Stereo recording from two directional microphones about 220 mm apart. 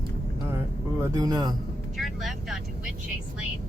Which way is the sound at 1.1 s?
15° right (ahead or behind).